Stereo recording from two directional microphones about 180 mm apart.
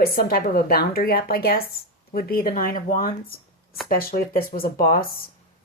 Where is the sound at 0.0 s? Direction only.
55° left (ahead or behind).